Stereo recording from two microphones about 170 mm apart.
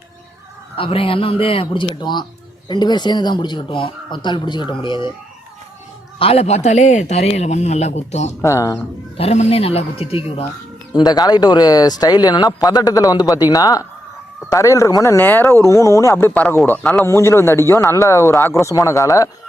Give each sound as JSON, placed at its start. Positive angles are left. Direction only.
{"t": 0.8, "sound": "a man's voice", "side_deg": 35}
{"t": 6.1, "sound": "a man's voice", "side_deg": 35}
{"t": 8.4, "sound": "speech", "side_deg": 15}
{"t": 9.1, "sound": "a man's voice", "side_deg": 35}
{"t": 10.9, "sound": "speech", "side_deg": 25}